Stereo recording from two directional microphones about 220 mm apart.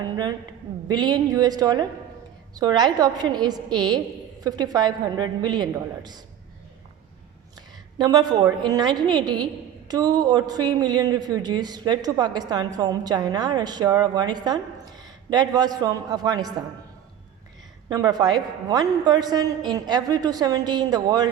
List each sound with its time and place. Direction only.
0.0 s a woman's voice: 20° right (ahead or behind)
7.9 s a woman's voice: 20° right (ahead or behind)
17.8 s a man's voice: 15° right (ahead or behind)